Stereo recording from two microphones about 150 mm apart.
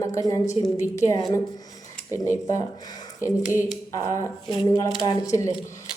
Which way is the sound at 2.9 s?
25° left (ahead or behind).